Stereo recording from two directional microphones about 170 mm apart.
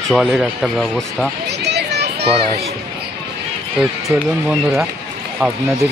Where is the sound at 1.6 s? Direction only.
80° right.